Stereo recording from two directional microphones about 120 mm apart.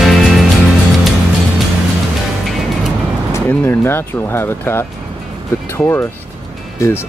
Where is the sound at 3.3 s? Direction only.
20° left (ahead or behind).